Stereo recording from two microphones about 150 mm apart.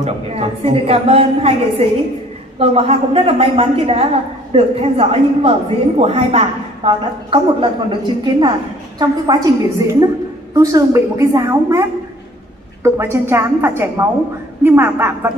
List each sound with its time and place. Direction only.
0.0 s a woman's voice: 40° right (ahead or behind); by 11.8 s 20° right (ahead or behind)
12.8 s a woman's voice: 15° right (ahead or behind)